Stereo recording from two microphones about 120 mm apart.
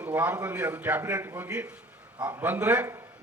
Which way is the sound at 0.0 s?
15° right (ahead or behind).